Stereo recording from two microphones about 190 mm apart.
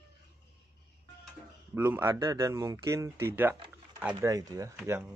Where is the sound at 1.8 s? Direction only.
10° right (ahead or behind).